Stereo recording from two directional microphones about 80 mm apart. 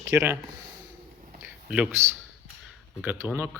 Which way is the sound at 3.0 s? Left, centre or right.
Centre.